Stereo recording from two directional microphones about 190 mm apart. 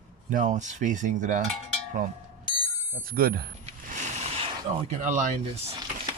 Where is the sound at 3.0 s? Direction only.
50° right (ahead or behind).